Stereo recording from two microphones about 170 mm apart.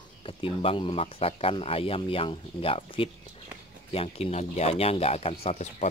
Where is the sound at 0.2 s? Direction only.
35° left (ahead or behind).